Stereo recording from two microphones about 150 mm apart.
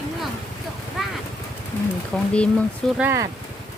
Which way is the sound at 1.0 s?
Centre (ahead or behind).